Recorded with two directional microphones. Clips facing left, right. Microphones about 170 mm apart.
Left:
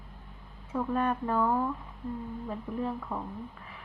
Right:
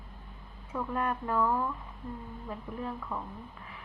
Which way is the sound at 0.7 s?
30° left (ahead or behind).